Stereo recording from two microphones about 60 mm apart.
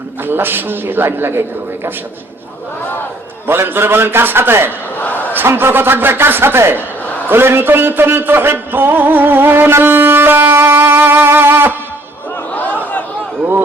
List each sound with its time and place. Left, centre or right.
0.3 s a man's voice: right
3.4 s a man's voice: right
4.9 s crowd: left
5.3 s a man's voice: right
12.5 s chatter: left